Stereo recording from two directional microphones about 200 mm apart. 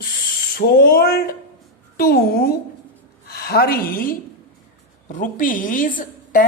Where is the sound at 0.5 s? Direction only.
50° left (ahead or behind).